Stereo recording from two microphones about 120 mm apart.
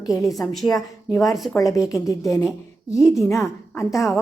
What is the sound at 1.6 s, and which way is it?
A woman's voice, 25° left (ahead or behind).